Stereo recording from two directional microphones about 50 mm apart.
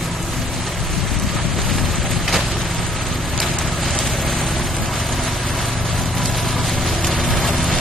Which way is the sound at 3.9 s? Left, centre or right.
Centre.